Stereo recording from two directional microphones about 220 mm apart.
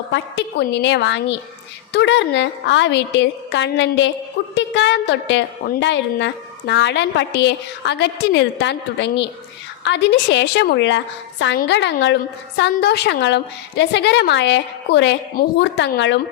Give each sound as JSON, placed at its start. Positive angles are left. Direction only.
{"t": 0.1, "sound": "a woman's voice", "side_deg": 50}